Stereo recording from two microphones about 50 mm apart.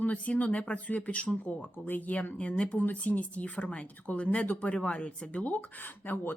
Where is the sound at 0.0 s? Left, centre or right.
Left.